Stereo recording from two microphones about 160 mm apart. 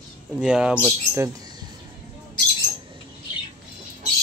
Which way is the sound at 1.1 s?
20° right (ahead or behind).